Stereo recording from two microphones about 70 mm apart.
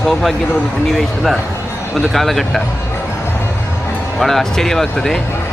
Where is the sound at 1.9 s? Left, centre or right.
Centre.